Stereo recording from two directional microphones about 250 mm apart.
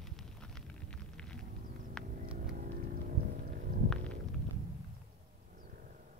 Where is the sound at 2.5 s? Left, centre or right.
Right.